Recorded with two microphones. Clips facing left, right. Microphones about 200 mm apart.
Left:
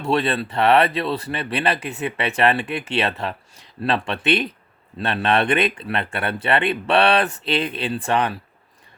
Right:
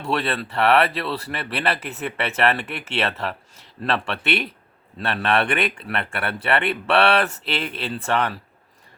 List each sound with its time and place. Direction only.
0.0 s speech: 20° left (ahead or behind)